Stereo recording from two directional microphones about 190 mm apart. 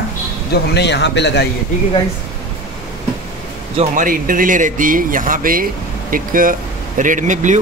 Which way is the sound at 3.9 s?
45° right (ahead or behind).